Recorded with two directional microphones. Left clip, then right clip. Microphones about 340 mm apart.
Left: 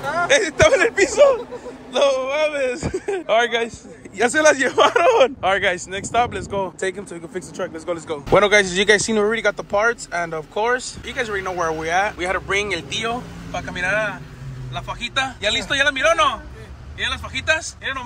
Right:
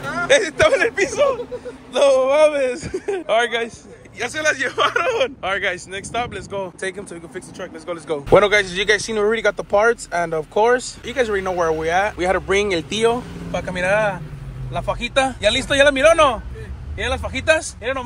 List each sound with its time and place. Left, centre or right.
0.0 s speech: centre
2.0 s speech: centre
13.5 s speech: centre